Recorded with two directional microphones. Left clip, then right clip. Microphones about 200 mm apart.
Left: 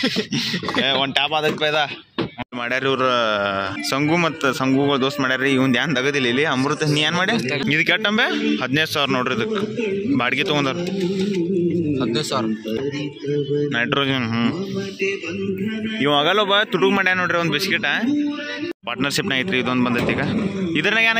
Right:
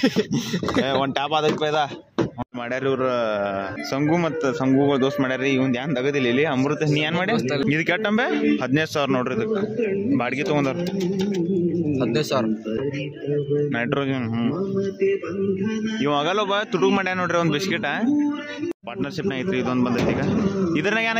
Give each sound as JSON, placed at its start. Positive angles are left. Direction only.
{"t": 0.8, "sound": "a man's voice", "side_deg": -15}
{"t": 5.4, "sound": "a man's voice", "side_deg": 5}
{"t": 12.0, "sound": "speech", "side_deg": -25}
{"t": 13.7, "sound": "a man's voice", "side_deg": -5}
{"t": 16.0, "sound": "a man's voice", "side_deg": 5}
{"t": 19.3, "sound": "a man's voice", "side_deg": 0}